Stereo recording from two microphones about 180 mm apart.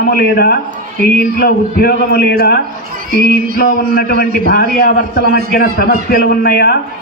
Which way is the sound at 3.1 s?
50° right (ahead or behind).